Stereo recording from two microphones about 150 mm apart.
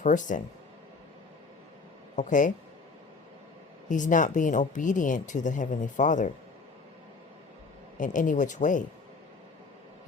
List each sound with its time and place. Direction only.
0.0 s speech: 55° left (ahead or behind)
2.1 s speech: 60° left (ahead or behind)
3.8 s speech: 60° left (ahead or behind)
7.9 s speech: 60° left (ahead or behind)